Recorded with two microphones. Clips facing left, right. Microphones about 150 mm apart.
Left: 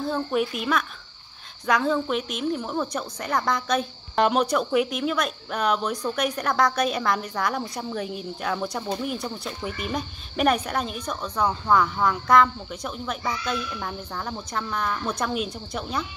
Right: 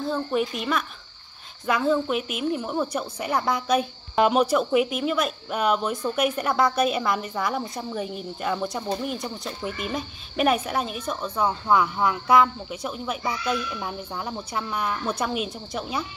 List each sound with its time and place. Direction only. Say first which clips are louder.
0.0 s a woman's voice: even; centre (ahead or behind)